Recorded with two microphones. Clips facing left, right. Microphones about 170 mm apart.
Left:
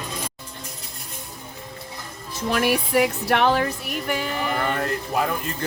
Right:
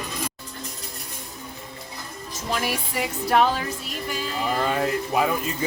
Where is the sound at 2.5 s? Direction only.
60° left (ahead or behind).